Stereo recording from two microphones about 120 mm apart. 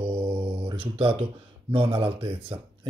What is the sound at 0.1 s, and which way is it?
Mantra, 50° right (ahead or behind).